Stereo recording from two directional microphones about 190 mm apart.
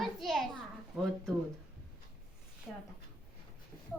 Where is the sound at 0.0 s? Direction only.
Centre (ahead or behind).